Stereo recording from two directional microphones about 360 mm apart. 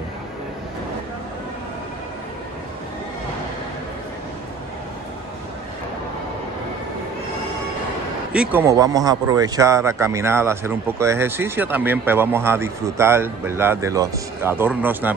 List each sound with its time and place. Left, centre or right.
8.3 s speech: centre